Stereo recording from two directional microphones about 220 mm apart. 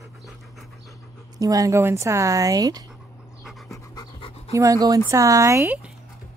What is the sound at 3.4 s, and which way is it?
Pant, centre (ahead or behind).